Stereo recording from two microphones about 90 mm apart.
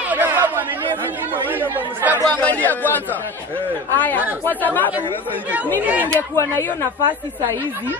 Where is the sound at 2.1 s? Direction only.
20° left (ahead or behind).